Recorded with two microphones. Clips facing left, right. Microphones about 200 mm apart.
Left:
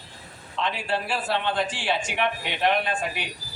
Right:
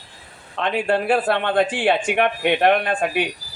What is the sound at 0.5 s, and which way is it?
A man's voice, 55° right (ahead or behind).